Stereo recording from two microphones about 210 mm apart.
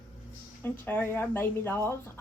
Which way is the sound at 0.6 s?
10° left (ahead or behind).